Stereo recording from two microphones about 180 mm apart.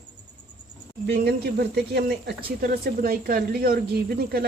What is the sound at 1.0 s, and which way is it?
Speech, 65° right (ahead or behind).